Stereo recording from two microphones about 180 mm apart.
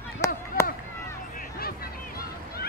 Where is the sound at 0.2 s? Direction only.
15° left (ahead or behind).